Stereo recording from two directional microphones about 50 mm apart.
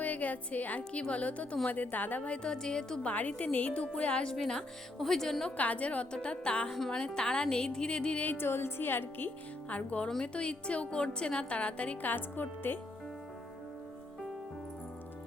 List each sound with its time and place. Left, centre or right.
0.0 s a woman's voice: left; by 3.1 s centre
3.1 s a woman's voice: left; by 5.5 s centre
5.5 s a woman's voice: left
6.7 s speech: centre
8.2 s a woman's voice: left
9.6 s a woman's voice: left
12.0 s speech: left